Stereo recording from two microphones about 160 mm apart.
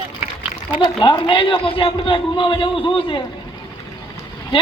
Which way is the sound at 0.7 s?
30° left (ahead or behind).